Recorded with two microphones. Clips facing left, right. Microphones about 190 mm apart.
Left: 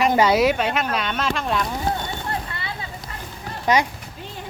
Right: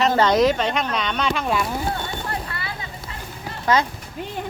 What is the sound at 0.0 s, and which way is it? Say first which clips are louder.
Speech: even; 10° left (ahead or behind).